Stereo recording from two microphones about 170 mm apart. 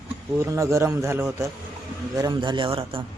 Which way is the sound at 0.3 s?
20° right (ahead or behind).